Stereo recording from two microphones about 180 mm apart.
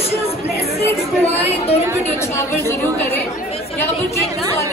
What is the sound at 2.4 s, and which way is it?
Speech, 15° left (ahead or behind).